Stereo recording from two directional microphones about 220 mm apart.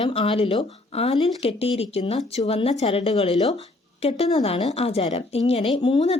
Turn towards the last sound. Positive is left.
turn(degrees=25)  # may be behind; listen again after turning